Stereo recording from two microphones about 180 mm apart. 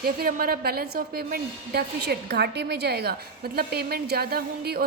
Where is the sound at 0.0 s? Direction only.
55° right (ahead or behind).